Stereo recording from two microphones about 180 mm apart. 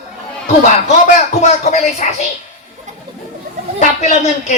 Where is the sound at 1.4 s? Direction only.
40° left (ahead or behind).